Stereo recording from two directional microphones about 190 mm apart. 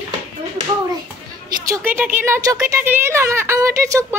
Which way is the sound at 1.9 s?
10° right (ahead or behind).